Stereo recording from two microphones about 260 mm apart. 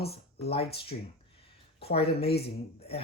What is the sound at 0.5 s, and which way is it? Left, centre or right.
Speech, left.